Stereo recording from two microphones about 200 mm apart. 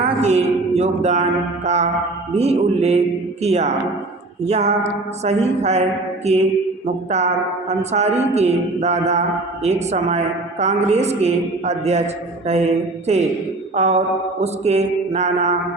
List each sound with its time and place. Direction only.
0.2 s a man's voice: 35° right (ahead or behind)
13.7 s a man's voice: 35° right (ahead or behind)